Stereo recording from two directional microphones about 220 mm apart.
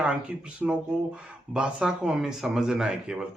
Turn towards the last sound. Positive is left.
turn(degrees=-5)  # may be behind; listen again after turning